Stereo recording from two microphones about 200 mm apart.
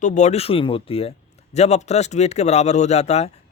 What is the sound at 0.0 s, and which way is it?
Speech, 35° left (ahead or behind).